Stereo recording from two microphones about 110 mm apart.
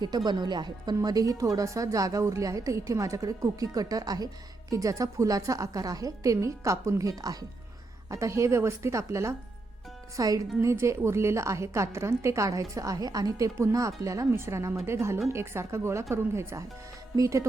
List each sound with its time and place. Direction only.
0.3 s a woman's voice: 40° right (ahead or behind)